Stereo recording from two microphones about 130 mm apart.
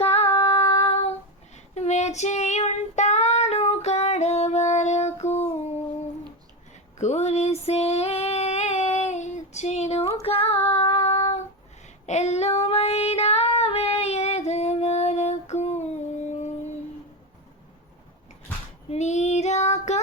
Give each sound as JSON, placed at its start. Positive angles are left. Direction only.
{"t": 0.0, "sound": "female singing", "side_deg": 50}
{"t": 7.0, "sound": "female singing", "side_deg": 60}
{"t": 10.2, "sound": "child singing", "side_deg": 50}
{"t": 12.0, "sound": "female singing", "side_deg": 60}
{"t": 18.9, "sound": "female singing", "side_deg": 60}